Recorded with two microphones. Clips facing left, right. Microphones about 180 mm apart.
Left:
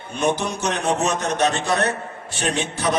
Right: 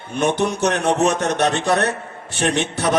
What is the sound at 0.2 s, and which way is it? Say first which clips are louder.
A man's voice: right 3 dB; 60° right (ahead or behind).